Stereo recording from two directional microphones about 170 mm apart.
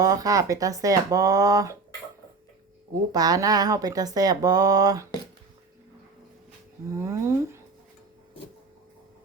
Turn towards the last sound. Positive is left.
turn(degrees=-15)  # may be behind; listen again after turning